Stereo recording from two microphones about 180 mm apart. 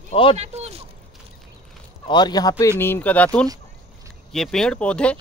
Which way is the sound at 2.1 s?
20° left (ahead or behind).